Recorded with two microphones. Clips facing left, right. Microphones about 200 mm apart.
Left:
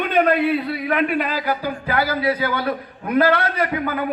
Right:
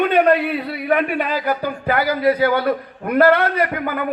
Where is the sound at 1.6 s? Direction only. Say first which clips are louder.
Right 2 dB; 60° right (ahead or behind).